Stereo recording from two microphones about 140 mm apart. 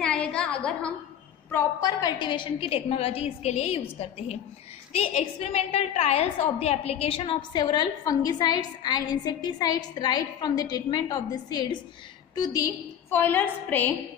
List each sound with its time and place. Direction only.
0.0 s a woman's voice: 5° left (ahead or behind)
1.5 s a woman's voice: 20° left (ahead or behind); by 3.8 s 45° left (ahead or behind)
4.9 s a woman's voice: 50° left (ahead or behind); by 12.7 s 25° left (ahead or behind)
13.1 s a woman's voice: 15° left (ahead or behind)